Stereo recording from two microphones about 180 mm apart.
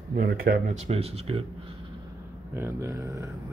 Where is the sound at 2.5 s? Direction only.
15° right (ahead or behind).